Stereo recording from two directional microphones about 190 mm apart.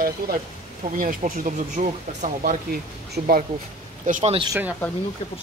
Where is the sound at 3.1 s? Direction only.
50° right (ahead or behind).